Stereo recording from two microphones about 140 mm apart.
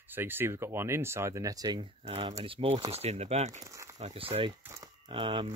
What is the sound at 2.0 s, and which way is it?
Speech, 45° right (ahead or behind).